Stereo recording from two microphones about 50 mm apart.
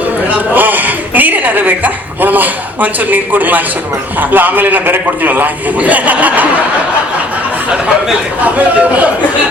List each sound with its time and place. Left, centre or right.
0.3 s a man's voice: right
8.4 s speech: right